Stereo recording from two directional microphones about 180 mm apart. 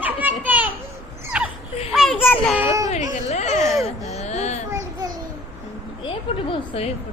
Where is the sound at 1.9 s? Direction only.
Centre (ahead or behind).